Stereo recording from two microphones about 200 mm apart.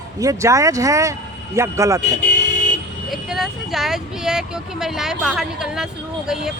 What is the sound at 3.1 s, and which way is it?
Speech, centre (ahead or behind).